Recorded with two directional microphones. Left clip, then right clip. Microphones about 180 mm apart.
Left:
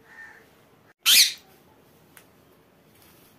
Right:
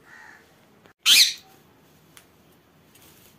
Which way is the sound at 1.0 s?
25° left (ahead or behind).